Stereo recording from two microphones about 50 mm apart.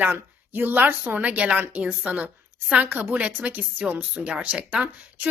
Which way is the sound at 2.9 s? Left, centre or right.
Right.